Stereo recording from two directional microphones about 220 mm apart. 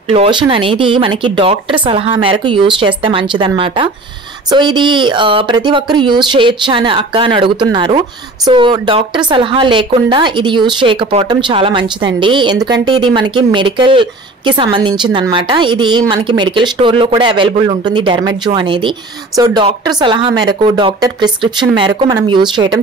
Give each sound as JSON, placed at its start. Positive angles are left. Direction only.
{"t": 0.1, "sound": "speech", "side_deg": -25}